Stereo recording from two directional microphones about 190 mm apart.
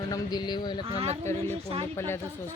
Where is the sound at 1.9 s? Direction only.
15° left (ahead or behind).